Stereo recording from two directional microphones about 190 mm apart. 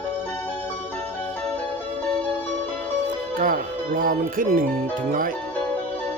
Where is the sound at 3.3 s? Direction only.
50° right (ahead or behind).